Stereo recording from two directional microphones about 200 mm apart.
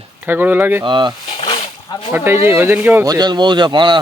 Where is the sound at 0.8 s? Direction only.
25° right (ahead or behind).